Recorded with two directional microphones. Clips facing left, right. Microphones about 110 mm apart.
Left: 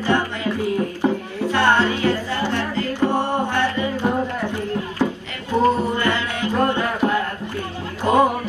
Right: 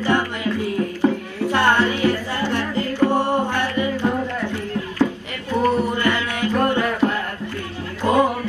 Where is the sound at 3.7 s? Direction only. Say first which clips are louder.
Even; 20° left (ahead or behind).